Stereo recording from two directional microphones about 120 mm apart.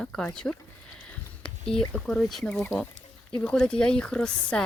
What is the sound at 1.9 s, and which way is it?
Speech, 5° left (ahead or behind).